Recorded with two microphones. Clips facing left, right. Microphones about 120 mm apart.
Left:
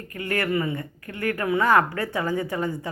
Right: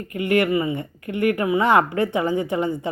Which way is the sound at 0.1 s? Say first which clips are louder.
Right 6 dB; 20° right (ahead or behind).